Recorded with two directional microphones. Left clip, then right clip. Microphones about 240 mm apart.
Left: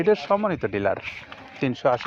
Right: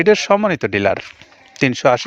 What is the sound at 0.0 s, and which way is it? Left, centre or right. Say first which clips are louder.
Speech: right 8 dB; right.